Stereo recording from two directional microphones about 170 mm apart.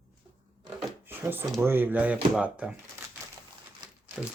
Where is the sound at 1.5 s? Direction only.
15° right (ahead or behind).